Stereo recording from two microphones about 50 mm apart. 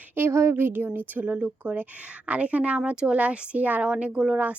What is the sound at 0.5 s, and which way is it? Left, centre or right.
A woman's voice, right.